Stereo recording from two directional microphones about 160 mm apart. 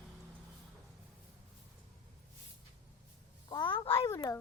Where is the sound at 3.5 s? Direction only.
30° left (ahead or behind).